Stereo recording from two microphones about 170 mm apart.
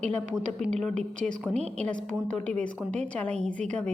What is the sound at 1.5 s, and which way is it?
Speech, 40° right (ahead or behind).